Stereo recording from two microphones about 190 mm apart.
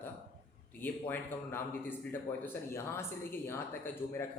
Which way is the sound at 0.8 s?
10° left (ahead or behind).